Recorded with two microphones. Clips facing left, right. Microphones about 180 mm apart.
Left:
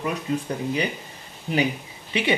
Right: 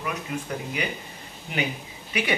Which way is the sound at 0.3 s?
30° left (ahead or behind).